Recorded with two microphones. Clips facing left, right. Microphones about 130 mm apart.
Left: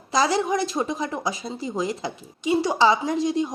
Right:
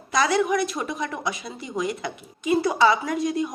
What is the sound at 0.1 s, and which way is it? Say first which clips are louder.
Speech: even; 30° left (ahead or behind).